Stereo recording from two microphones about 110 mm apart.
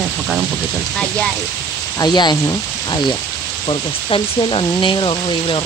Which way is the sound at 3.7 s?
50° left (ahead or behind).